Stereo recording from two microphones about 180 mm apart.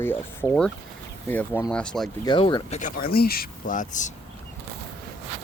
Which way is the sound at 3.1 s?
55° left (ahead or behind).